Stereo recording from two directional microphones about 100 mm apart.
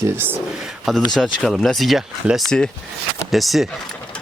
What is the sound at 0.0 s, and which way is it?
Speech, 20° right (ahead or behind).